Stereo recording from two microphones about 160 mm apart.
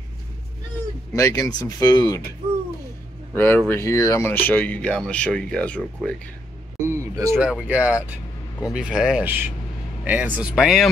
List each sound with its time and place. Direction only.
1.1 s speech: 20° left (ahead or behind)
3.3 s speech: 15° left (ahead or behind)
6.9 s a sound: 20° right (ahead or behind)
7.3 s speech: 5° right (ahead or behind)